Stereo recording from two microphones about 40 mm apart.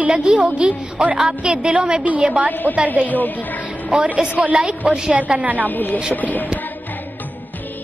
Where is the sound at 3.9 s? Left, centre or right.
Right.